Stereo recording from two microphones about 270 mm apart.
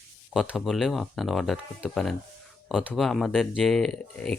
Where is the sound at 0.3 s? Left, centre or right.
Centre.